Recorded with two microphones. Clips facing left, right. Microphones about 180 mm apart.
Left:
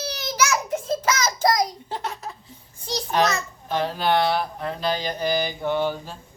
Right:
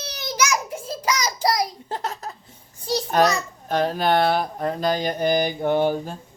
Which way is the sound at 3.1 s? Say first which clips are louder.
Right 2 dB; 45° right (ahead or behind).